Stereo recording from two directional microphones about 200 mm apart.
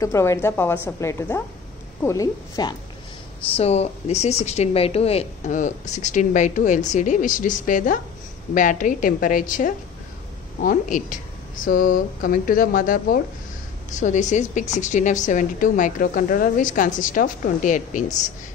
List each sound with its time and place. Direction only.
0.0 s a woman's voice: 15° left (ahead or behind)
3.5 s a woman's voice: 30° left (ahead or behind)